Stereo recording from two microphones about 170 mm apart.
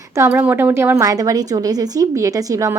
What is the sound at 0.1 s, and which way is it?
A woman's voice, 15° right (ahead or behind).